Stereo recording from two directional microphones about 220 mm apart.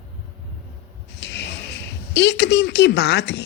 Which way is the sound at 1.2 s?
50° left (ahead or behind).